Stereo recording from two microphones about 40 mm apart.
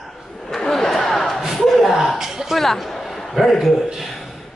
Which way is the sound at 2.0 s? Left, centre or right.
Centre.